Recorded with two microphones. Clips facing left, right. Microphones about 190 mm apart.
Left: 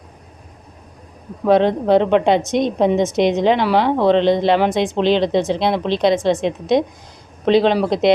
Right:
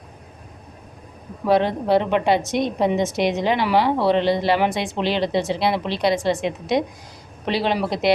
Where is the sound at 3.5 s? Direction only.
10° right (ahead or behind).